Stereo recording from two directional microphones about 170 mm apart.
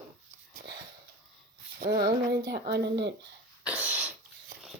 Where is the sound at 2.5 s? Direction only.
75° right (ahead or behind).